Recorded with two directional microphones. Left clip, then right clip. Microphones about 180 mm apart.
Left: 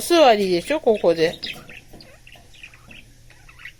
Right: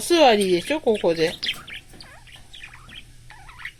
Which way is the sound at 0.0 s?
25° right (ahead or behind).